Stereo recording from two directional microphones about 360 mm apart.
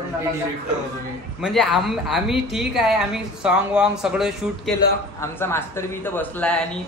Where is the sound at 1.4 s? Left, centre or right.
Centre.